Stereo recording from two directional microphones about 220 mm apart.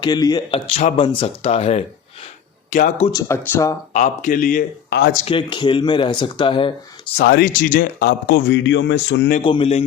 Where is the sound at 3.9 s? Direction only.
35° left (ahead or behind).